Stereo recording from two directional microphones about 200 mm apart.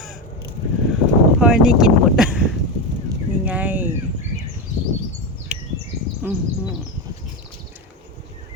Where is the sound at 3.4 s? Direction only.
10° right (ahead or behind).